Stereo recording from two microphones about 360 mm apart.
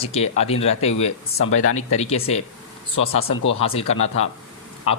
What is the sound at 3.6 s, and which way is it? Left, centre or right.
Speech, centre.